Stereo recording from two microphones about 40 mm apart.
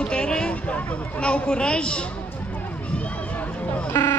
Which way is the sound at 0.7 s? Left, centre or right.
Left.